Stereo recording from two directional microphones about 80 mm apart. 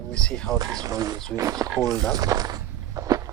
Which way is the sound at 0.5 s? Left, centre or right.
Right.